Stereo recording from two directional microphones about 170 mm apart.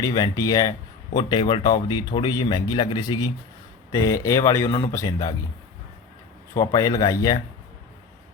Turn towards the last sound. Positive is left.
turn(degrees=20)  # may be behind; listen again after turning